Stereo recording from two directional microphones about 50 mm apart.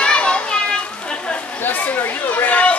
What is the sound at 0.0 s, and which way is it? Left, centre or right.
Children playing, centre.